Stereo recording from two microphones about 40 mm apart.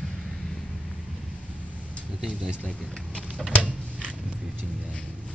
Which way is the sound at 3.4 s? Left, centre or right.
Centre.